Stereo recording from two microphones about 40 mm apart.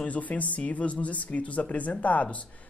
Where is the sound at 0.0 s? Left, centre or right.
Left.